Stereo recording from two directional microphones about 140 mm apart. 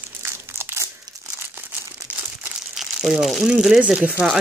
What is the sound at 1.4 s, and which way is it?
Crumpling, 15° right (ahead or behind).